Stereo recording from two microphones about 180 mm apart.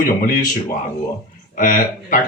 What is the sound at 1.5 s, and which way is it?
Speech, 50° left (ahead or behind).